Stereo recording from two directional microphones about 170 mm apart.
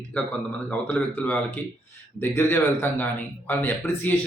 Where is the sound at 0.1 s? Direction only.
10° left (ahead or behind).